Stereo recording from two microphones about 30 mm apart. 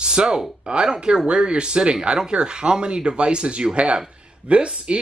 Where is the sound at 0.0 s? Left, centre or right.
Right.